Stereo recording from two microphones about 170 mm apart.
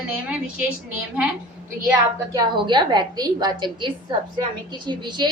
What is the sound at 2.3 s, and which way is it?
A woman's voice, 25° right (ahead or behind).